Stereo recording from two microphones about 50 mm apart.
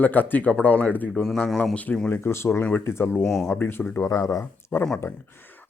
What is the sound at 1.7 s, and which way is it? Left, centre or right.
Speech, left.